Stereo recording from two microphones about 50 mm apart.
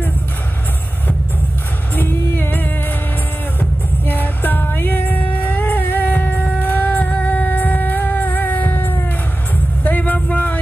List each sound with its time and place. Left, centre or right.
2.0 s music: left
4.1 s music: left
9.8 s a sound: left